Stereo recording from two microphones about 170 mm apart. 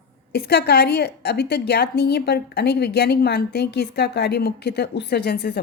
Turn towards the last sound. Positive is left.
turn(degrees=65)  # may be behind; listen again after turning